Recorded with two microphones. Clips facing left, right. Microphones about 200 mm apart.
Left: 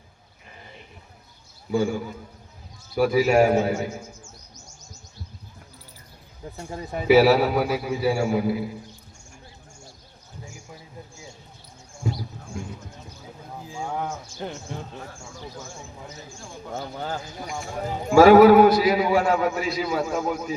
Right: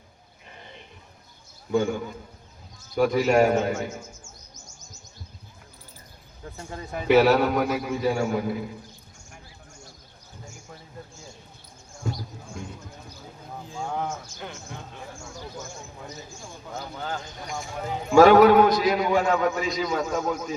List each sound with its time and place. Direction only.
1.7 s a man's voice: 5° left (ahead or behind)
7.0 s a man's voice: 5° left (ahead or behind)
13.7 s a man's voice: 10° left (ahead or behind)
16.7 s speech: 30° left (ahead or behind)
18.1 s a man's voice: 5° left (ahead or behind)